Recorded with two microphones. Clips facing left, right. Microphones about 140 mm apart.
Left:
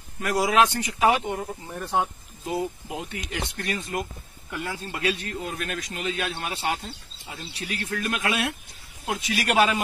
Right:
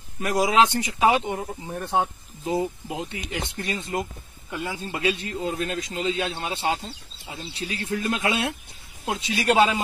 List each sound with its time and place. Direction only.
0.2 s speech: 20° right (ahead or behind)